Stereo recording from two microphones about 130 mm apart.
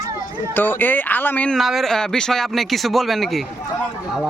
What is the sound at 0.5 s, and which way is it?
Speech, 15° left (ahead or behind).